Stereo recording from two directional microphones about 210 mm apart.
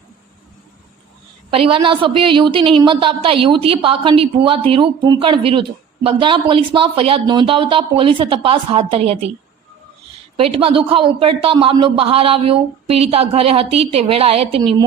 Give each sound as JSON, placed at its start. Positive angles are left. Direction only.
{"t": 1.5, "sound": "a woman's voice", "side_deg": -25}
{"t": 10.3, "sound": "a woman's voice", "side_deg": -25}